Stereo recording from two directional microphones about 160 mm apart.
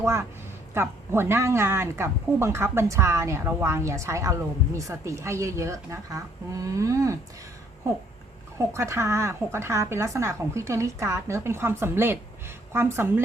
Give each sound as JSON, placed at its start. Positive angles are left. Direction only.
{"t": 0.0, "sound": "speech", "side_deg": -15}
{"t": 8.5, "sound": "speech", "side_deg": -20}